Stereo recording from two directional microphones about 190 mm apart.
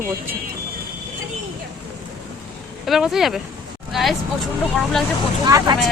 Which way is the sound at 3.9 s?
Centre (ahead or behind).